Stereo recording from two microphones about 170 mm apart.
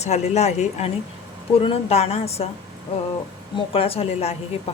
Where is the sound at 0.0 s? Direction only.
40° left (ahead or behind).